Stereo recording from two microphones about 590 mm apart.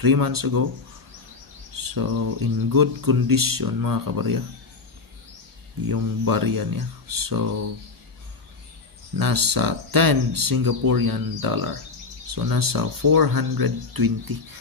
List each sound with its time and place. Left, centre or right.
0.0 s speech: right
1.8 s speech: right
5.9 s speech: right
9.2 s speech: right